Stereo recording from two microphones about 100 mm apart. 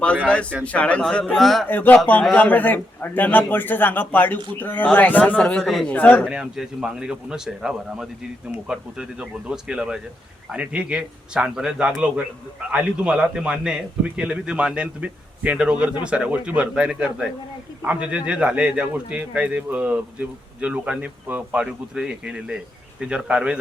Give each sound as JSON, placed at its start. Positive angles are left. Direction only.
{"t": 0.6, "sound": "a man's voice", "side_deg": 15}
{"t": 1.0, "sound": "speech", "side_deg": 5}
{"t": 1.6, "sound": "a man's voice", "side_deg": 20}
{"t": 5.9, "sound": "a man's voice", "side_deg": 15}
{"t": 6.2, "sound": "a man's voice", "side_deg": -10}